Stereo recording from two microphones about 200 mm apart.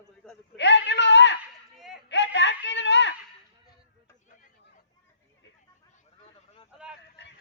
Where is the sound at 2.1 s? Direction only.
60° left (ahead or behind).